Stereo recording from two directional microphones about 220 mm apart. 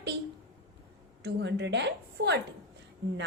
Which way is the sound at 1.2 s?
50° right (ahead or behind).